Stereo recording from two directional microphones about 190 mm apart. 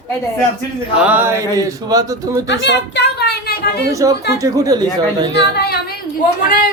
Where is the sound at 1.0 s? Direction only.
10° right (ahead or behind).